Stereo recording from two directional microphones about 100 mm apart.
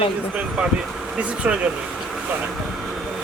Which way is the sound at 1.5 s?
15° right (ahead or behind).